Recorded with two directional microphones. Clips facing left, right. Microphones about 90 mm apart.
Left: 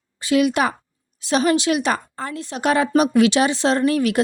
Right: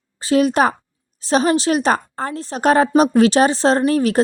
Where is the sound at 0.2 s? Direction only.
35° right (ahead or behind).